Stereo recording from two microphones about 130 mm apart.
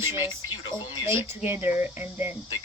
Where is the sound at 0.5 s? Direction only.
40° left (ahead or behind).